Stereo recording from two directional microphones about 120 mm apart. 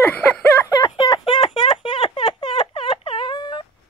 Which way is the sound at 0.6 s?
35° left (ahead or behind).